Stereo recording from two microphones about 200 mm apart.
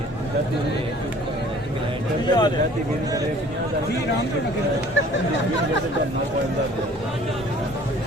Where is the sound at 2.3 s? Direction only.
20° left (ahead or behind).